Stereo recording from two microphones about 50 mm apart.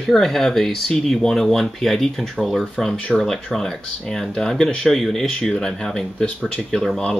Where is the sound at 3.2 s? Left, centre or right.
Centre.